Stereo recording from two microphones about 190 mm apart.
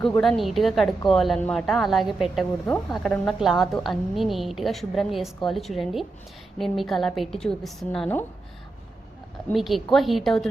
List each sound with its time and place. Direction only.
0.0 s a woman's voice: centre (ahead or behind)
9.5 s a woman's voice: centre (ahead or behind)